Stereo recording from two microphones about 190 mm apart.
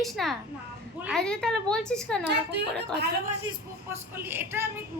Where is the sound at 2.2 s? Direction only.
60° right (ahead or behind).